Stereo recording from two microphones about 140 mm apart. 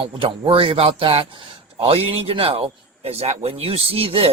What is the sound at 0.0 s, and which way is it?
A man's voice, 40° right (ahead or behind).